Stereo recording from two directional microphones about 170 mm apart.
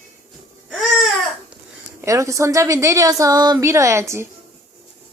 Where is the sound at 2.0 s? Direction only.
20° right (ahead or behind).